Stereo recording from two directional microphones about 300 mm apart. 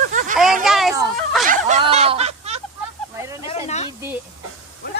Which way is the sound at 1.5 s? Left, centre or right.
Right.